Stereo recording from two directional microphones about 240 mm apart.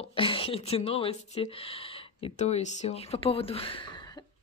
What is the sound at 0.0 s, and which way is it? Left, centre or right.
Speech, left.